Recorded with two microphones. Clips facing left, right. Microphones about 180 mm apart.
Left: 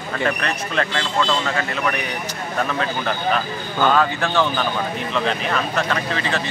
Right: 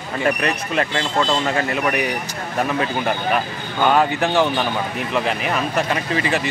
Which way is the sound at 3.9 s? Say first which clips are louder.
Right 2 dB; 20° right (ahead or behind).